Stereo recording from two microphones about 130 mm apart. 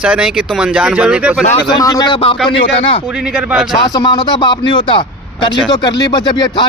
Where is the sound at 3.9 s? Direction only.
30° left (ahead or behind).